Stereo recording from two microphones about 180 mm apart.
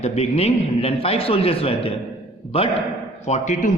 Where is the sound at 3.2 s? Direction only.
40° left (ahead or behind).